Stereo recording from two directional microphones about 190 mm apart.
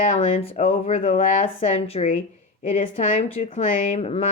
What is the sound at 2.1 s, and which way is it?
Speech, 45° left (ahead or behind).